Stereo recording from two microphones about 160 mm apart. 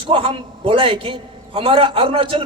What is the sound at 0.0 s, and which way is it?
A man's voice, 30° right (ahead or behind).